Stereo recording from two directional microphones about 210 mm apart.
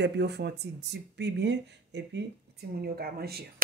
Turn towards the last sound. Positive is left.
turn(degrees=-50)  # may be behind; listen again after turning